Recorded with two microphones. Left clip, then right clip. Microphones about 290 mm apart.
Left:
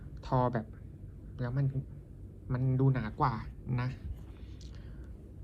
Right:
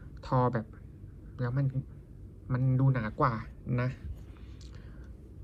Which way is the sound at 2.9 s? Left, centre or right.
Centre.